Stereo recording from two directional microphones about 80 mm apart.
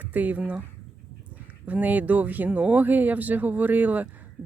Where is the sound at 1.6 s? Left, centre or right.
Centre.